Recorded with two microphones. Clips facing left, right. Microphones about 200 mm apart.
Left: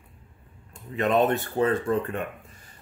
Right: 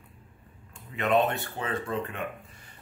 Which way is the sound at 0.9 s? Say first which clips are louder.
Left 3 dB; 40° left (ahead or behind).